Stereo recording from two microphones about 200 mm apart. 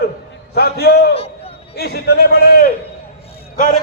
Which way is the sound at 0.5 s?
55° left (ahead or behind).